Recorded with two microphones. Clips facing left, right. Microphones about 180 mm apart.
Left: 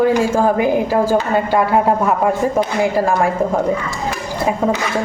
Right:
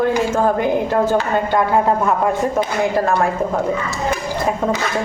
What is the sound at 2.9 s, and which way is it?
Speech, 10° left (ahead or behind).